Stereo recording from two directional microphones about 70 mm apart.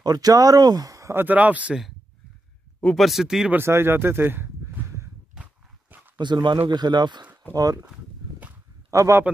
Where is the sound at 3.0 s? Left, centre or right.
Centre.